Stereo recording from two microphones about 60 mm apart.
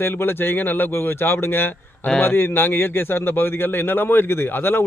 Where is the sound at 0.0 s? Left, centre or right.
Left.